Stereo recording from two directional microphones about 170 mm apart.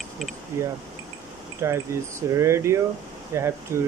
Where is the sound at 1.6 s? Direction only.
15° right (ahead or behind).